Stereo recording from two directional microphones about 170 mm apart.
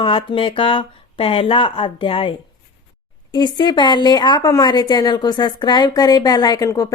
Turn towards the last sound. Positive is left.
turn(degrees=20)  # may be behind; listen again after turning